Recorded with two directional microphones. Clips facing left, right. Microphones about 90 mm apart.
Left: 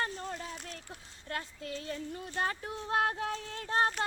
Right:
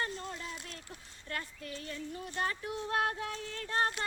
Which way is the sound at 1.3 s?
30° left (ahead or behind).